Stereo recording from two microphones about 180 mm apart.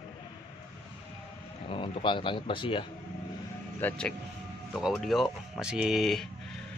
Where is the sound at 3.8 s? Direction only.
10° left (ahead or behind).